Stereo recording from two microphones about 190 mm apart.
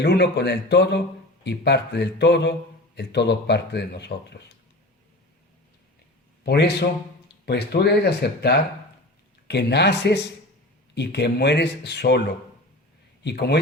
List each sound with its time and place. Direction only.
0.0 s speech: 60° left (ahead or behind)
6.4 s a man's voice: 60° left (ahead or behind)